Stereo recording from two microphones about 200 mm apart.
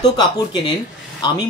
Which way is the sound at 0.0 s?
20° left (ahead or behind).